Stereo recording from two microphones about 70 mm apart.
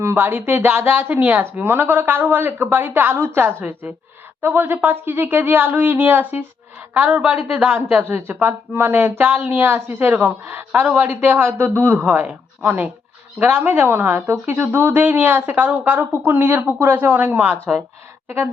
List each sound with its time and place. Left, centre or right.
0.0 s a woman's voice: right